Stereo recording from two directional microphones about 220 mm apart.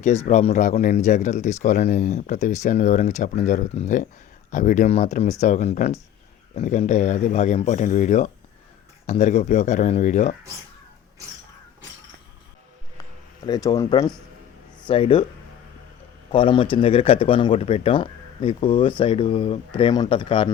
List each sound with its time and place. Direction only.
0.3 s speech: 35° left (ahead or behind)
13.0 s a sound: 20° left (ahead or behind)
14.8 s speech: 25° left (ahead or behind)
16.3 s speech: 25° left (ahead or behind)